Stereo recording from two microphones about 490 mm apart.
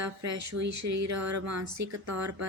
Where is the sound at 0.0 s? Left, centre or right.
Right.